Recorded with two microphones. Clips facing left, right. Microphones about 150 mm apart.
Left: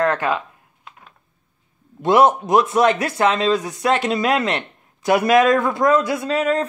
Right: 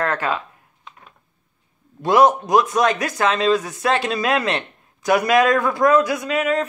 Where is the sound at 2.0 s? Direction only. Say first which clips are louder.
Even; 25° left (ahead or behind).